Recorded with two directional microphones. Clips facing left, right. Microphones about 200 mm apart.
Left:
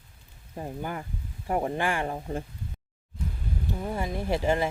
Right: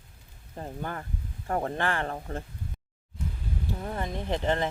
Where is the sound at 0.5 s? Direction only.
10° left (ahead or behind).